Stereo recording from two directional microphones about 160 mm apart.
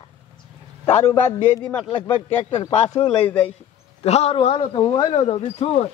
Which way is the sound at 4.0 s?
40° left (ahead or behind).